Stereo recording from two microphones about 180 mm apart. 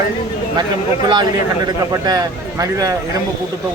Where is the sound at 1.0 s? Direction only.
25° right (ahead or behind).